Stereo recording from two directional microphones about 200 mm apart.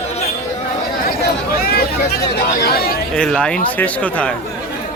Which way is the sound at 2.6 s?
50° left (ahead or behind).